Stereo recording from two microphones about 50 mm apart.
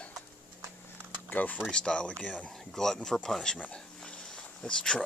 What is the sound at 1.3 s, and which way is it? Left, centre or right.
Speech, left.